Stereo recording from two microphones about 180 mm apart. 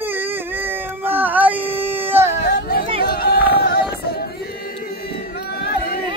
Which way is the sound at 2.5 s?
60° left (ahead or behind).